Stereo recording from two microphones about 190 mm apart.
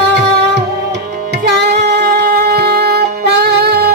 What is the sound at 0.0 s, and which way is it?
Music, 60° right (ahead or behind).